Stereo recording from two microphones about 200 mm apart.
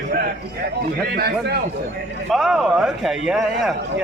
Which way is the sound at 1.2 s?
55° right (ahead or behind).